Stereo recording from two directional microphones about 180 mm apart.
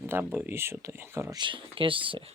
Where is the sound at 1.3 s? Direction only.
25° right (ahead or behind).